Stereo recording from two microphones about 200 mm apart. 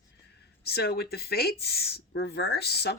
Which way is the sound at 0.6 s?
55° left (ahead or behind).